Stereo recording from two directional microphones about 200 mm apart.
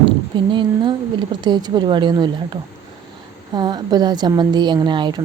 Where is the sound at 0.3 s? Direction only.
25° right (ahead or behind).